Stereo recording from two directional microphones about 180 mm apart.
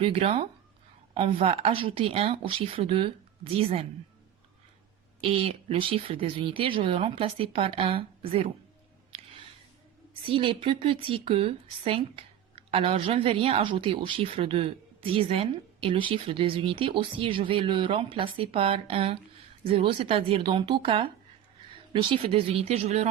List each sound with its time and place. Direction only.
0.0 s a woman's voice: 30° right (ahead or behind)
5.2 s a woman's voice: 30° right (ahead or behind)
9.1 s a sound: 30° right (ahead or behind)
10.2 s a woman's voice: 30° right (ahead or behind)